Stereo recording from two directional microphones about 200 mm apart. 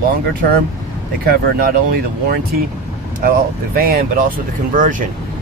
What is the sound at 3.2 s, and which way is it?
Speech, 45° right (ahead or behind).